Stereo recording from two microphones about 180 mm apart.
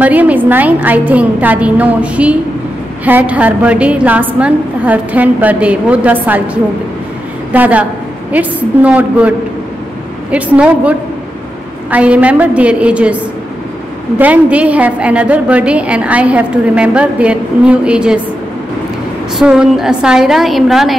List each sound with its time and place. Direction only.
0.0 s a woman's voice: 10° right (ahead or behind)
10.3 s a woman's voice: 5° right (ahead or behind)
19.3 s a woman's voice: 5° right (ahead or behind)